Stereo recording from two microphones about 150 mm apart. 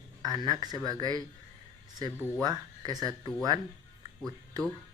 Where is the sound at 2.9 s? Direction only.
25° right (ahead or behind).